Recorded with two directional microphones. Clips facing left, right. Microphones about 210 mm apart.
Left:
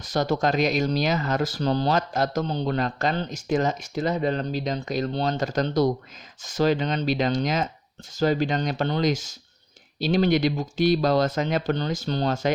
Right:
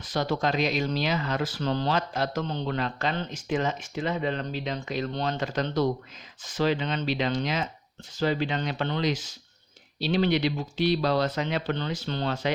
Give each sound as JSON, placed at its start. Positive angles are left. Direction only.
{"t": 0.0, "sound": "speech", "side_deg": 45}